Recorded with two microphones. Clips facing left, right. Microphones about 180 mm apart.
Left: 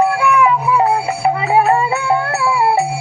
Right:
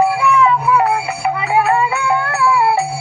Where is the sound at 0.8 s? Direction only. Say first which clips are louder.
Left 2 dB; 30° left (ahead or behind).